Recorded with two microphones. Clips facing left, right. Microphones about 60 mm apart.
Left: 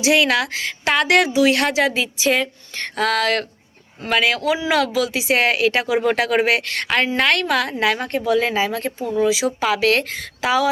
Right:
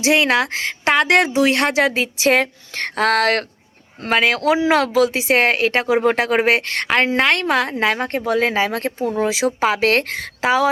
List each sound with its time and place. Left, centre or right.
0.0 s speech: right
4.4 s speech: right
4.7 s speech: right
10.4 s speech: right